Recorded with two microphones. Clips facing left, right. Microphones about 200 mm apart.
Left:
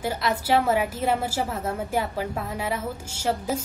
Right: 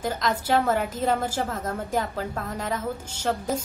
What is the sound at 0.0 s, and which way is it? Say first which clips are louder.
A woman's voice: even; 10° left (ahead or behind).